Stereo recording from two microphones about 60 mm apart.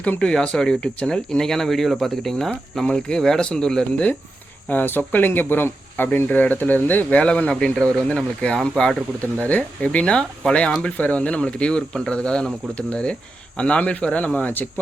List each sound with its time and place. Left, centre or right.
0.0 s speech: centre
4.7 s speech: left; by 9.0 s centre
9.4 s speech: left